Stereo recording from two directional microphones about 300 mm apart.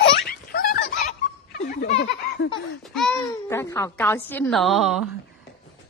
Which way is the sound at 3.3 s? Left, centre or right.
Centre.